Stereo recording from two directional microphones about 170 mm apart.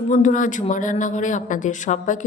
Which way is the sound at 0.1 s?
50° left (ahead or behind).